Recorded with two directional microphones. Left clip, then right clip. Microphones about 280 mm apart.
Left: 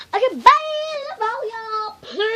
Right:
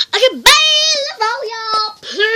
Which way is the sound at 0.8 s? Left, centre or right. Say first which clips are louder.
Right 8 dB; centre.